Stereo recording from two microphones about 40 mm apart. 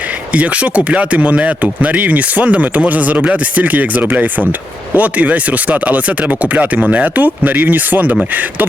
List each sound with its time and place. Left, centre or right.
0.3 s speech: right